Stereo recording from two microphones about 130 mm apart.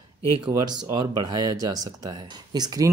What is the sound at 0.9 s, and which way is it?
Speech, 30° right (ahead or behind).